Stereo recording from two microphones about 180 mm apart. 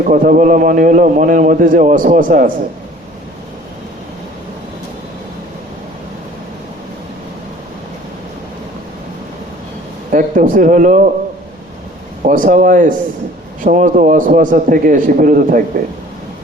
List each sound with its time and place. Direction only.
0.0 s a man's voice: 50° right (ahead or behind)
10.1 s a man's voice: 50° right (ahead or behind)
12.2 s a man's voice: 50° right (ahead or behind)